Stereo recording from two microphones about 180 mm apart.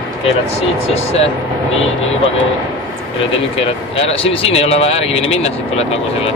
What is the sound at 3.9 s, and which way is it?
Speech, 35° left (ahead or behind).